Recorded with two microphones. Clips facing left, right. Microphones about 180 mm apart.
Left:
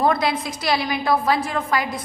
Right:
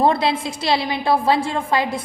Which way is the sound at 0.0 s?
30° right (ahead or behind).